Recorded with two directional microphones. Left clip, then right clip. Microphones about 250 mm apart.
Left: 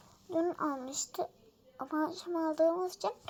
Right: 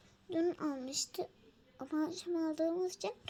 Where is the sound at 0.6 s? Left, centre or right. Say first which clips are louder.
Left 3 dB; right.